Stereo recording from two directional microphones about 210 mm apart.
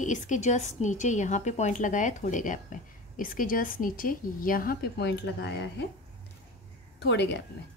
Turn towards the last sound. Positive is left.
turn(degrees=55)  # may be behind; listen again after turning